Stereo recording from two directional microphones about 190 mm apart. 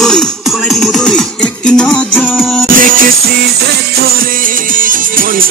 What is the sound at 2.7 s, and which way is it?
Music, 45° right (ahead or behind).